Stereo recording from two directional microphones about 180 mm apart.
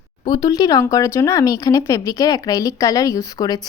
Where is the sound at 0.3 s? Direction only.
20° left (ahead or behind).